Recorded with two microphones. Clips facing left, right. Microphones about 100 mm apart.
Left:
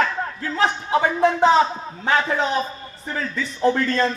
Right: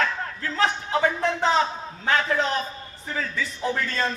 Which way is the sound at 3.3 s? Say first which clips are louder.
Left 9 dB; centre (ahead or behind).